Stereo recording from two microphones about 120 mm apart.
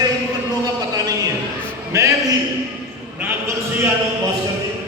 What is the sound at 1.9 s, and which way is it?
Speech, 25° right (ahead or behind).